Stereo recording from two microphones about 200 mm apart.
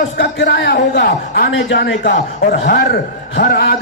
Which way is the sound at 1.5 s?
65° left (ahead or behind).